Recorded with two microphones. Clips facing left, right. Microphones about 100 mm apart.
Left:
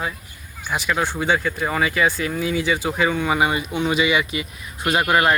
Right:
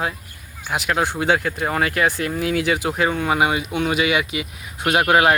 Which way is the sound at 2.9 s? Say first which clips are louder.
Even; 35° right (ahead or behind).